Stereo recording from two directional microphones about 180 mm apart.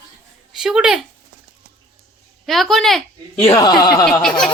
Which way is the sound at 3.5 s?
20° left (ahead or behind).